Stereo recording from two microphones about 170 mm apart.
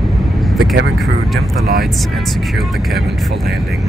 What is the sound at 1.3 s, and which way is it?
Speech, 60° right (ahead or behind).